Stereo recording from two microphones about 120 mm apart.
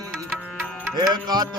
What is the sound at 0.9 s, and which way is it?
Music, 35° right (ahead or behind).